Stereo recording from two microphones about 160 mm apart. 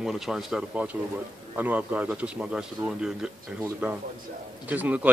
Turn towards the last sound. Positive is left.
turn(degrees=-10)  # may be behind; listen again after turning